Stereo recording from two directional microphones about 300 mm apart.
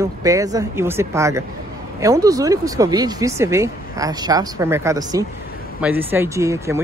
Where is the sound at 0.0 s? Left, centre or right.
Centre.